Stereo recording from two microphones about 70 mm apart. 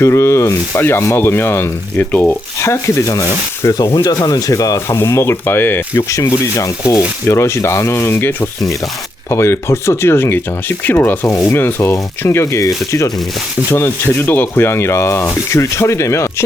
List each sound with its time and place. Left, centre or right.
0.0 s speech: left
2.6 s speech: left
3.9 s speech: left
5.0 s speech: left
6.1 s speech: left